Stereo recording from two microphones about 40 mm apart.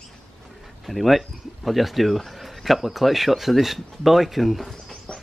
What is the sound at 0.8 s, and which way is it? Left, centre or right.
Speech, centre.